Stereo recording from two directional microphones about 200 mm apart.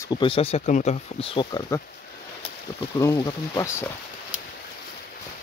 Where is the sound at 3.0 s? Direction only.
15° left (ahead or behind).